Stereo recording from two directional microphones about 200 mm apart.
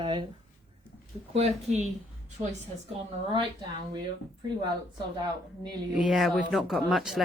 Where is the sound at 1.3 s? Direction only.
35° right (ahead or behind).